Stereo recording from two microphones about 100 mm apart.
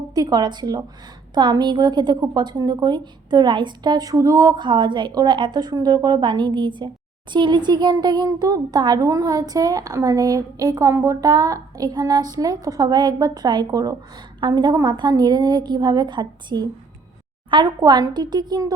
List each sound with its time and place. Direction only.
0.1 s a child's voice: 40° right (ahead or behind)